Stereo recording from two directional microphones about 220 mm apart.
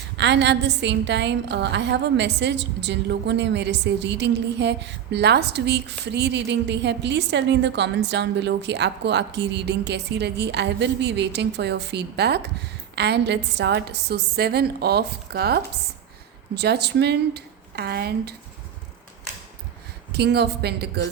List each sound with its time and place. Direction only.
0.2 s a woman's voice: 50° right (ahead or behind)
20.1 s a woman's voice: 50° right (ahead or behind)